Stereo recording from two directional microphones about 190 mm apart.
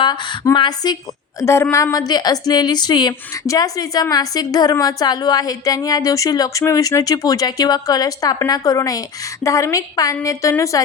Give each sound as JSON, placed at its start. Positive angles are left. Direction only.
{"t": 0.0, "sound": "a woman's voice", "side_deg": 25}